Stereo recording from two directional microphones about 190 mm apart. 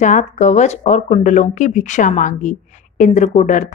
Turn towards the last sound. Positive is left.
turn(degrees=40)  # may be behind; listen again after turning